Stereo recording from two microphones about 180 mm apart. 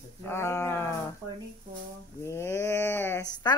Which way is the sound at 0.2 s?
15° left (ahead or behind).